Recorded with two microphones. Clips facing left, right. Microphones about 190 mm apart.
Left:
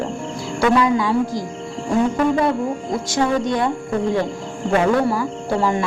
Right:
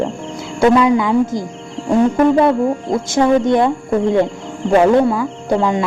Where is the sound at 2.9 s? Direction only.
25° right (ahead or behind).